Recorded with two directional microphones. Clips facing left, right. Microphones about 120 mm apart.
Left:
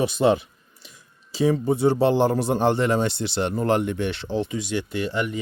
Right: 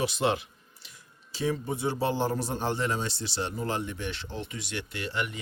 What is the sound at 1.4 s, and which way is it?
Speech, 90° left.